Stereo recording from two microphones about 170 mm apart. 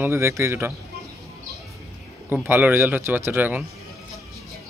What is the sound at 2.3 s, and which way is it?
Speech, 10° right (ahead or behind).